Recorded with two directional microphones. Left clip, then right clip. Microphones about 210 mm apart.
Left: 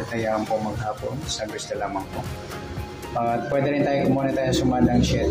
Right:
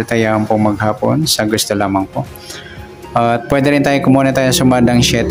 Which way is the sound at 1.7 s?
45° right (ahead or behind).